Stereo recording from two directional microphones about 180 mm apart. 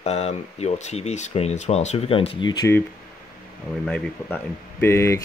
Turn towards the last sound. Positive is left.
turn(degrees=15)  # may be behind; listen again after turning